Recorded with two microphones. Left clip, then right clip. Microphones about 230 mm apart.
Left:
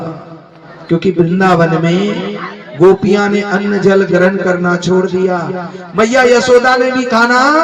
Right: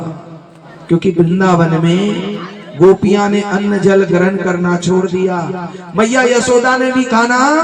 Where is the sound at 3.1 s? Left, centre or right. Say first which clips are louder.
Left 1 dB; right.